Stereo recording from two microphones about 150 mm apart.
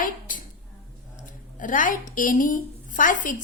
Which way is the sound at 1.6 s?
60° left (ahead or behind).